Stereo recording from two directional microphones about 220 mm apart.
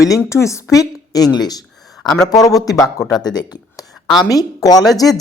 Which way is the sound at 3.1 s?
20° left (ahead or behind).